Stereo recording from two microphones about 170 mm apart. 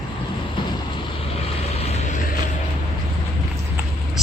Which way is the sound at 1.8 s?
40° left (ahead or behind).